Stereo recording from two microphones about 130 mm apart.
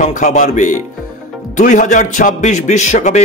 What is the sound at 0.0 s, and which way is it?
A man's voice, 70° left (ahead or behind).